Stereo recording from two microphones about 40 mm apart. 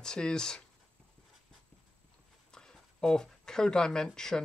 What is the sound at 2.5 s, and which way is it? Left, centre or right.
Speech, centre.